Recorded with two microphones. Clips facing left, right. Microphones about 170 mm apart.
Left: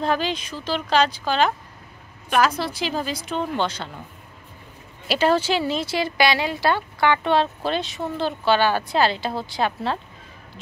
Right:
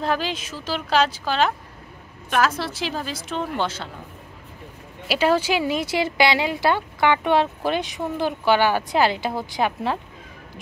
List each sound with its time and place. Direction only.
0.0 s a woman's voice: 5° right (ahead or behind)
5.0 s speech: 10° right (ahead or behind)